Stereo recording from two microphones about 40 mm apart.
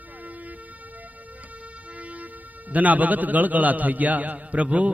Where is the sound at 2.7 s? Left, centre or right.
Right.